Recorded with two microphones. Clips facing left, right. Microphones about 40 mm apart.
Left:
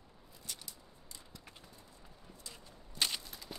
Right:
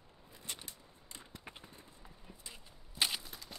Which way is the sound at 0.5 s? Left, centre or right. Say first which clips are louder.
Right 2 dB; right.